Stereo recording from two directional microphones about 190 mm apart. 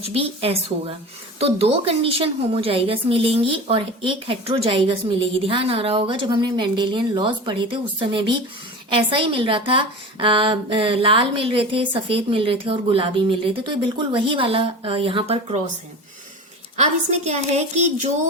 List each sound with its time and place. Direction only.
0.0 s a woman's voice: 30° right (ahead or behind)
16.7 s a woman's voice: 35° right (ahead or behind)